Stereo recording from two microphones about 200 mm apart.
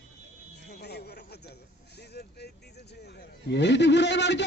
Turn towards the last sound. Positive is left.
turn(degrees=60)  # may be behind; listen again after turning